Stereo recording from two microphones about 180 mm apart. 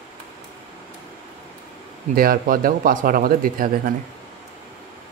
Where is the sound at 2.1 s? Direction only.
50° right (ahead or behind).